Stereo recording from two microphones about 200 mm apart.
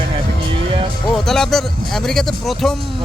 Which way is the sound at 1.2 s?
Centre (ahead or behind).